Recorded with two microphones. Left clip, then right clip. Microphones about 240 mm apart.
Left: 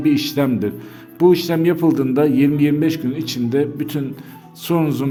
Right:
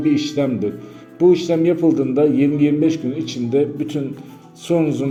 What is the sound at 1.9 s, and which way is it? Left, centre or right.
A man's voice, left.